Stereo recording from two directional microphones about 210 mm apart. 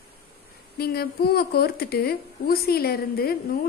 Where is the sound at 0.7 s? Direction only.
45° left (ahead or behind).